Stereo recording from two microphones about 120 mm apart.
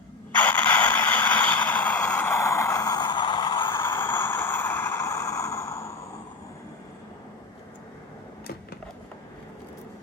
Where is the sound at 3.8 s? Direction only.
20° left (ahead or behind).